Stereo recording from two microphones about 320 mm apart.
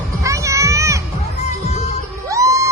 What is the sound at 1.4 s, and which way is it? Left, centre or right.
Music, left.